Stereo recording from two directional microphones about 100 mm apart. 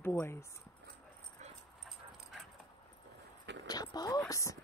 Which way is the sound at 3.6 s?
40° left (ahead or behind).